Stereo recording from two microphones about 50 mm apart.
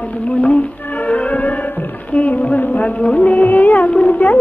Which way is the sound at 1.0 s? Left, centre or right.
Left.